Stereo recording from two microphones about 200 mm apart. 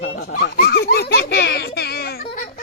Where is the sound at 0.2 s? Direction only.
50° left (ahead or behind).